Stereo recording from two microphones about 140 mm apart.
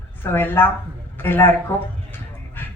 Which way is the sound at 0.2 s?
15° left (ahead or behind).